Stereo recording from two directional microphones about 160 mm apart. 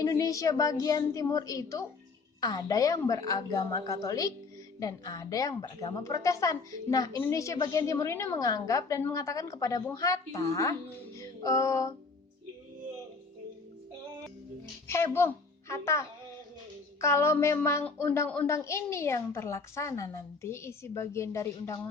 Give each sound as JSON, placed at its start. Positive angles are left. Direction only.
{"t": 0.1, "sound": "a woman's voice", "side_deg": 20}
{"t": 11.2, "sound": "music", "side_deg": 20}
{"t": 14.8, "sound": "a child's voice", "side_deg": 15}